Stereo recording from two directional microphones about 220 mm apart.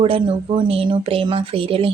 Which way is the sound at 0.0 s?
25° right (ahead or behind).